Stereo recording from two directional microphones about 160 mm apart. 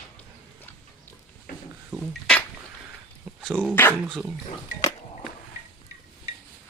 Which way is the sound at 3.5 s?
10° right (ahead or behind).